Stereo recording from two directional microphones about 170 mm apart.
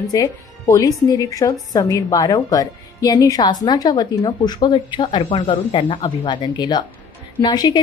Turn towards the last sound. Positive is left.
turn(degrees=25)  # may be behind; listen again after turning